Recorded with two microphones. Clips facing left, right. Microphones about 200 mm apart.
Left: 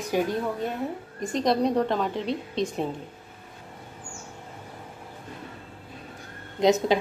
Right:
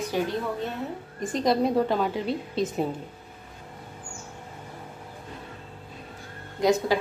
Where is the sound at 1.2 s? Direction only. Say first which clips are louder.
Even; centre (ahead or behind).